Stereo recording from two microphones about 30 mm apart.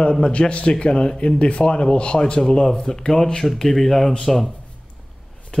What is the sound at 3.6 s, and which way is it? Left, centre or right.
Speech, centre.